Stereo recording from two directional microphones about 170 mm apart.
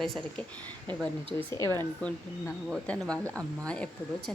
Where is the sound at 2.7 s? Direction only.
5° left (ahead or behind).